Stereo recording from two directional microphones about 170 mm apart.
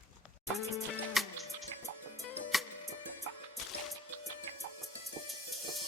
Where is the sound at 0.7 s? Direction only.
Centre (ahead or behind).